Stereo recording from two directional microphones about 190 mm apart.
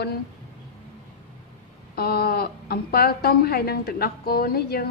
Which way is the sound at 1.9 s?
55° left (ahead or behind).